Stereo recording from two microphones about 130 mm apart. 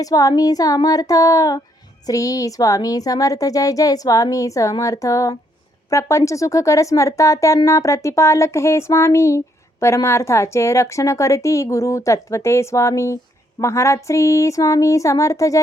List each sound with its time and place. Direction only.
0.0 s speech: 30° left (ahead or behind)